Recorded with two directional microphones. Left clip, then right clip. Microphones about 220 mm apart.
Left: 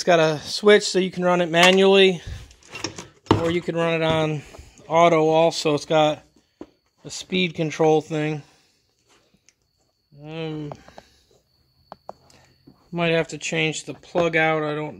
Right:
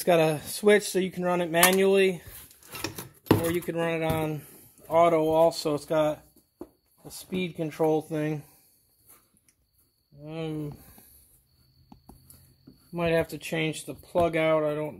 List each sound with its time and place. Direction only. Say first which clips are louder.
0.0 s speech: left 5 dB; 5° left (ahead or behind); by 2.2 s 30° left (ahead or behind)
2.7 s a sound: left 4 dB; 5° left (ahead or behind)
3.5 s speech: left 6 dB; 20° left (ahead or behind)
4.8 s speech: left 5 dB; 45° left (ahead or behind); by 8.4 s 25° left (ahead or behind)
10.2 s speech: left 3 dB; 15° left (ahead or behind)
12.9 s speech: left 4 dB; 20° left (ahead or behind)